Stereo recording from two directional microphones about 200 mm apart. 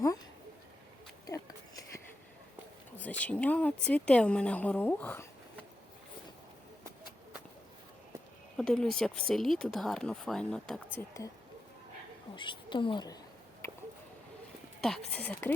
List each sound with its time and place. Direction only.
3.0 s speech: 5° left (ahead or behind)
8.5 s speech: 5° left (ahead or behind)
10.9 s speech: 15° left (ahead or behind)
12.4 s speech: 25° left (ahead or behind)
13.6 s a sound: 15° left (ahead or behind)
14.8 s speech: centre (ahead or behind)